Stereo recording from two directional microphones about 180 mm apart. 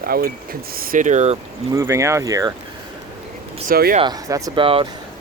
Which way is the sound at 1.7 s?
15° right (ahead or behind).